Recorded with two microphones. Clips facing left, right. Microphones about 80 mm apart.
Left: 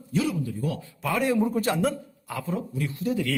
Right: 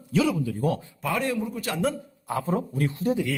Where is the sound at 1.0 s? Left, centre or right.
Centre.